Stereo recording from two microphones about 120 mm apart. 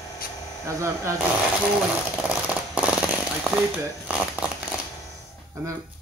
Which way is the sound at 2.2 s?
10° right (ahead or behind).